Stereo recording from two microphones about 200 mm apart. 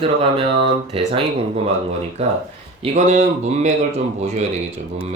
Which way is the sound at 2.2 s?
35° right (ahead or behind).